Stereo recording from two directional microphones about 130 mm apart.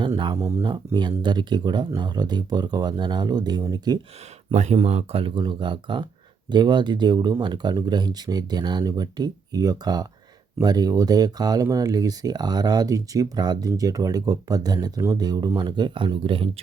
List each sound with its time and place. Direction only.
0.3 s speech: 20° right (ahead or behind)
0.9 s speech: 35° right (ahead or behind)
4.5 s speech: 55° right (ahead or behind)